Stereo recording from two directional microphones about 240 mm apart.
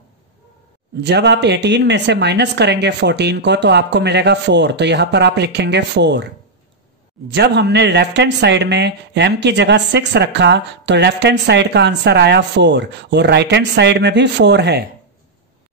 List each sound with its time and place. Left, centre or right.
1.0 s speech: right
7.3 s speech: right